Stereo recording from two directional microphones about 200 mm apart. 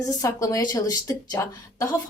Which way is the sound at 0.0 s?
15° left (ahead or behind).